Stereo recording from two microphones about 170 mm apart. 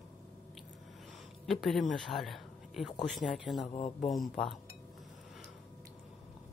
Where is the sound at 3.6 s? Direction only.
45° left (ahead or behind).